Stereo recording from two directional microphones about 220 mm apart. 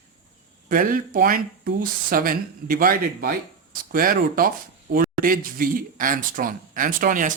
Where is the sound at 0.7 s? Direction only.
40° right (ahead or behind).